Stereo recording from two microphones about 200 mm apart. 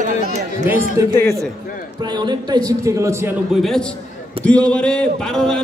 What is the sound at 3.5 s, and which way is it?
A man's voice, centre (ahead or behind).